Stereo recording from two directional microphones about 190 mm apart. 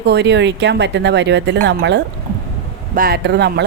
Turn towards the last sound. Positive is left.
turn(degrees=-60)  # may be behind; listen again after turning